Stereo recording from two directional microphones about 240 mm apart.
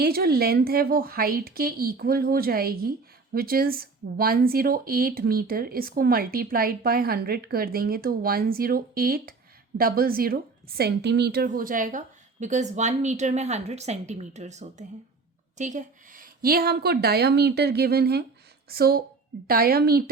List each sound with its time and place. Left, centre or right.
0.0 s speech: right